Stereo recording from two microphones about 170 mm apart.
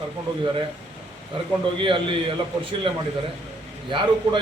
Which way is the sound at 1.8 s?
30° right (ahead or behind).